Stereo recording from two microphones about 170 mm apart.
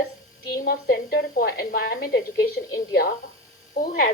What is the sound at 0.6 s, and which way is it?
A woman's voice, 75° left (ahead or behind).